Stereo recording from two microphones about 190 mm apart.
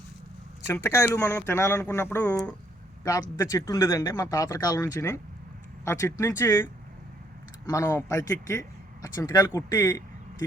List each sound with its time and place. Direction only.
0.7 s speech: 15° left (ahead or behind)
3.0 s speech: 15° left (ahead or behind)
7.7 s speech: 15° left (ahead or behind)